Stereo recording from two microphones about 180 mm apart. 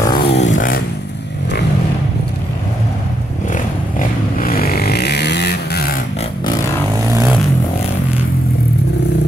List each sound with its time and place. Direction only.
0.1 s vehicle: 30° left (ahead or behind); by 0.8 s 50° left (ahead or behind)
4.0 s vehicle: 50° left (ahead or behind)